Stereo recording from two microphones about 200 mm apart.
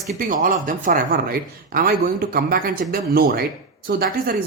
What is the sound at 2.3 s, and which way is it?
Speech, 50° right (ahead or behind).